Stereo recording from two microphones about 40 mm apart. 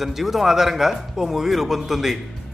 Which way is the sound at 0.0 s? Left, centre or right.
Centre.